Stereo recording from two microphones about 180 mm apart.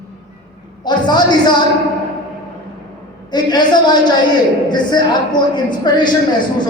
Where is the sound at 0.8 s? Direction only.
25° left (ahead or behind).